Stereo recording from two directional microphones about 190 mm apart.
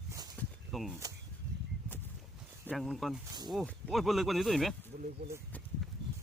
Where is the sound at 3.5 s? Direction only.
Centre (ahead or behind).